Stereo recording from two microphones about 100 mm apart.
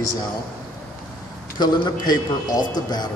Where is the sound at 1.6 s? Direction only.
45° left (ahead or behind).